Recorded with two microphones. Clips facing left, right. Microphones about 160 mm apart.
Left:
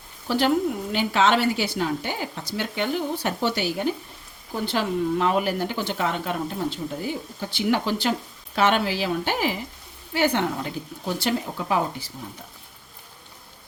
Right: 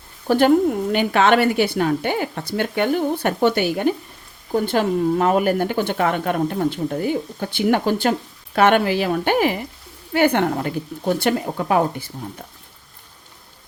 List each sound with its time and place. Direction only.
0.3 s a woman's voice: 50° right (ahead or behind)